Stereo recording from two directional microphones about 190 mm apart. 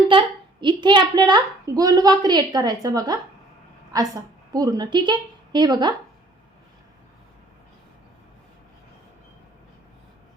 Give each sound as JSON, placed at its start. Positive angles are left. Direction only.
{"t": 0.1, "sound": "a woman's voice", "side_deg": -25}